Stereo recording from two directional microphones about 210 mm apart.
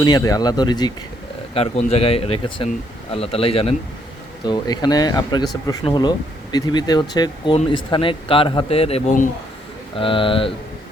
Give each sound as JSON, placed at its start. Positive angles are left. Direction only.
{"t": 0.0, "sound": "speech", "side_deg": 15}